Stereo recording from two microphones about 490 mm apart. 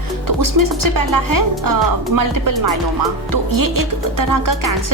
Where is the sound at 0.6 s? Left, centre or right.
Right.